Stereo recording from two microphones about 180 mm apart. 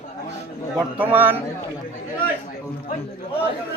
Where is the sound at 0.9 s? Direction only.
10° right (ahead or behind).